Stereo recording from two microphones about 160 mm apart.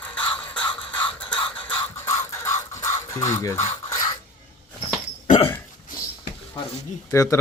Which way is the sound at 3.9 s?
25° left (ahead or behind).